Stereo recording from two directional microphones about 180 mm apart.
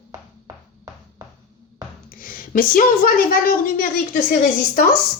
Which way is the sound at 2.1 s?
50° left (ahead or behind).